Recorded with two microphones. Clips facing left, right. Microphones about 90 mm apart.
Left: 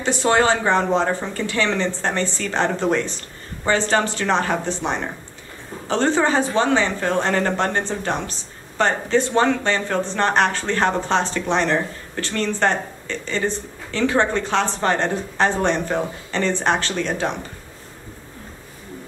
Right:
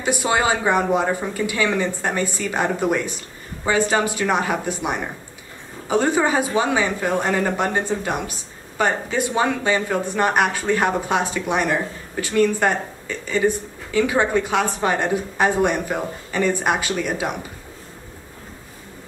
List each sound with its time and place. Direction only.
0.0 s speech: 10° right (ahead or behind)